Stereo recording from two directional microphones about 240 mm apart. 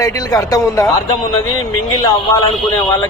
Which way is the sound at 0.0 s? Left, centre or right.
Centre.